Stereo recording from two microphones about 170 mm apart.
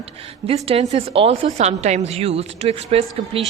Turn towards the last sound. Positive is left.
turn(degrees=-35)  # may be behind; listen again after turning